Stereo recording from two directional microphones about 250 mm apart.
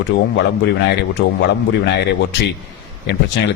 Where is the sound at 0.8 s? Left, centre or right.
Left.